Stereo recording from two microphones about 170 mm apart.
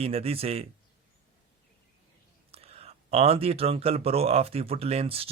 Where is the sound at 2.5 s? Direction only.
35° right (ahead or behind).